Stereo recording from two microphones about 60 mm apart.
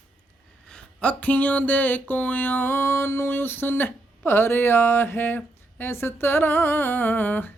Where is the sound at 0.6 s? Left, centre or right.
Centre.